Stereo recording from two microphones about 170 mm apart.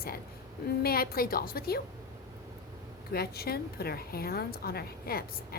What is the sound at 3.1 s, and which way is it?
A woman's voice, 65° left (ahead or behind).